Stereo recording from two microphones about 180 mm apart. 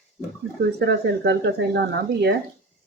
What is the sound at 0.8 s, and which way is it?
A woman's voice, 70° right (ahead or behind).